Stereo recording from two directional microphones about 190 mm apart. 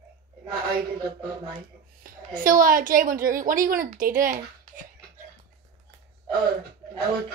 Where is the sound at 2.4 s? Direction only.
45° right (ahead or behind).